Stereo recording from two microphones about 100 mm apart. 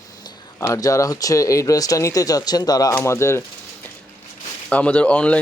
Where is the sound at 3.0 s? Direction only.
25° left (ahead or behind).